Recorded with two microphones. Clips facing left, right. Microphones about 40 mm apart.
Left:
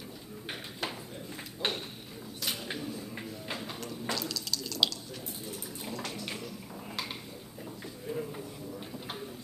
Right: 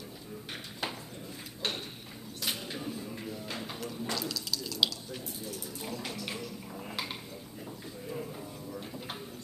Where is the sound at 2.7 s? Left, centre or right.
Centre.